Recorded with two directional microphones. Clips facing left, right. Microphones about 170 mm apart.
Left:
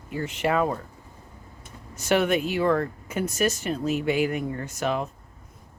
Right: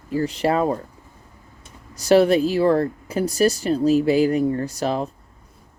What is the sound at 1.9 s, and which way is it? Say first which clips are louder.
Speech: right 7 dB; 35° right (ahead or behind).